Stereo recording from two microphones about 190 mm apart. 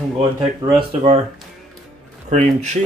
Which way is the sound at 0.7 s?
30° right (ahead or behind).